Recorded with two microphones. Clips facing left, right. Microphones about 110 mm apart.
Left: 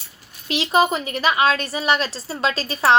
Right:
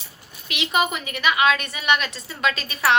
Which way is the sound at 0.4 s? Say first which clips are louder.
Left 5 dB; 35° left (ahead or behind).